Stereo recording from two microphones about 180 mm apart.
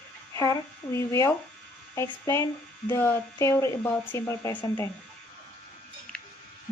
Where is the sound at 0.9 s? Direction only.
15° left (ahead or behind).